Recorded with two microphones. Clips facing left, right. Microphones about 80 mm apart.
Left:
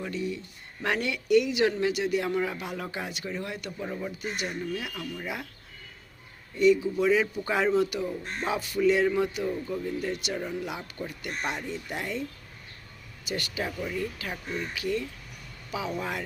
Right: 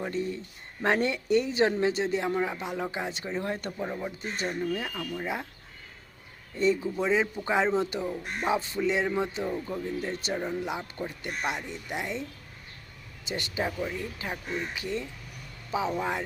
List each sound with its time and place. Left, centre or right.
0.0 s speech: right
3.7 s speech: centre
4.4 s speech: right
6.6 s speech: right
7.0 s speech: right
8.5 s speech: right
13.2 s speech: right